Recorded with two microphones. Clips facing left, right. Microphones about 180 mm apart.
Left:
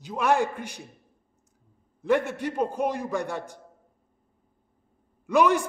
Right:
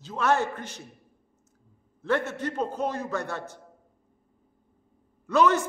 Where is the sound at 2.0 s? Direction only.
15° left (ahead or behind).